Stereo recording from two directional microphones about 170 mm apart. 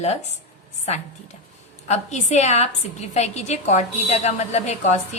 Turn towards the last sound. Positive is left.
turn(degrees=40)  # may be behind; listen again after turning